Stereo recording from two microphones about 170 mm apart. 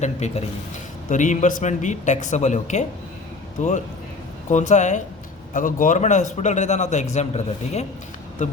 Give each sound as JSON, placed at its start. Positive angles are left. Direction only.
{"t": 0.0, "sound": "a man's voice", "side_deg": 40}